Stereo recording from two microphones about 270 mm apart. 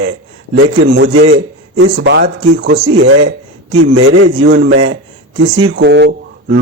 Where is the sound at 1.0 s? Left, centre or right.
Right.